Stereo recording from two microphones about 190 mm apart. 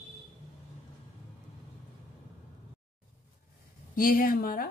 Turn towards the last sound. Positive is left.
turn(degrees=50)  # may be behind; listen again after turning